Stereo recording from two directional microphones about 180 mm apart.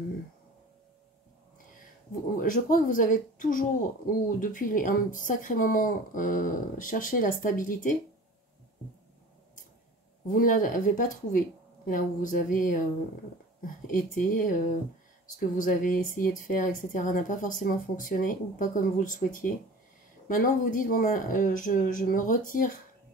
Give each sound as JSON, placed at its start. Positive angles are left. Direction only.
{"t": 2.3, "sound": "a woman's voice", "side_deg": 50}
{"t": 10.2, "sound": "a woman's voice", "side_deg": 45}